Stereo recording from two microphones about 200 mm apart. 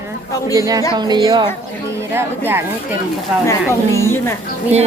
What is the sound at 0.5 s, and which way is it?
Speech, 15° right (ahead or behind).